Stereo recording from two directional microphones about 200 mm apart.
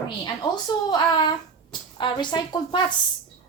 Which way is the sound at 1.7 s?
20° left (ahead or behind).